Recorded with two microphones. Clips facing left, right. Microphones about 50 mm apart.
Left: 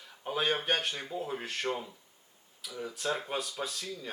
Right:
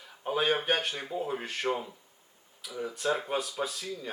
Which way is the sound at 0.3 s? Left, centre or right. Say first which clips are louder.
Right 3 dB; centre.